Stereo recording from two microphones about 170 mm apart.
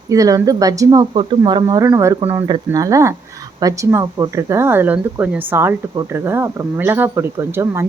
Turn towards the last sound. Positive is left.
turn(degrees=-15)  # may be behind; listen again after turning